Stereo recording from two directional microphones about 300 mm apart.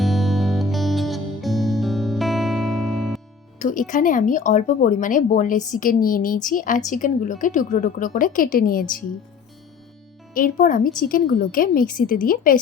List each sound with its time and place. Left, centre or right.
0.0 s music: centre
3.6 s speech: left
10.3 s speech: left